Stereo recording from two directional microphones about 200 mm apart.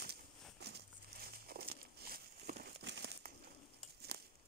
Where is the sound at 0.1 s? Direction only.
55° right (ahead or behind).